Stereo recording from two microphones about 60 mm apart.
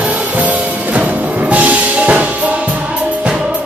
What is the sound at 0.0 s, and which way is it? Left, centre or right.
Music, right.